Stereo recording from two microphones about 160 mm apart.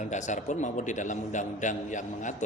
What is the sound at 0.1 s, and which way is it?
A man's voice, 50° left (ahead or behind).